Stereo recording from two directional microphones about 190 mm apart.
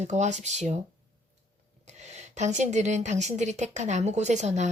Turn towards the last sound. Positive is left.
turn(degrees=-40)  # may be behind; listen again after turning